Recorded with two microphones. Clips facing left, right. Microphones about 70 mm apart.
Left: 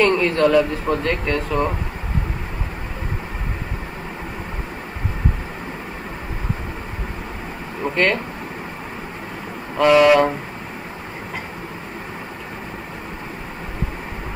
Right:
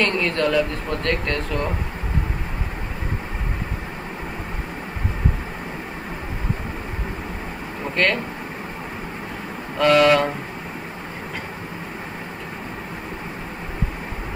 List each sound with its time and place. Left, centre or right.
0.0 s speech: centre
7.8 s speech: centre
9.8 s speech: centre